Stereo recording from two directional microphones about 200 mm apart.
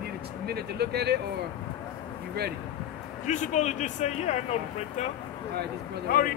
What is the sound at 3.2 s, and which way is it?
A man's voice, 35° left (ahead or behind).